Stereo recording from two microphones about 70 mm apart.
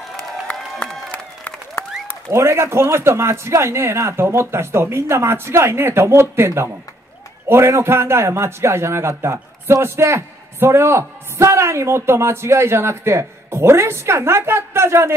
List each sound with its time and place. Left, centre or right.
0.5 s crowd: centre
1.1 s applause: left
2.2 s a man's voice: right